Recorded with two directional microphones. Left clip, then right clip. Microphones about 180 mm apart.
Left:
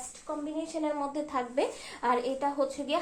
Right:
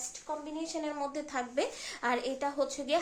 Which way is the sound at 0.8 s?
30° right (ahead or behind).